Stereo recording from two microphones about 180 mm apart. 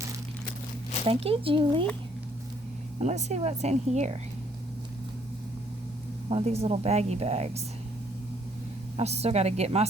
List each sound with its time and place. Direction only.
1.0 s speech: 30° right (ahead or behind)
3.0 s speech: 40° right (ahead or behind)
6.2 s speech: 35° right (ahead or behind)
9.0 s speech: 35° right (ahead or behind)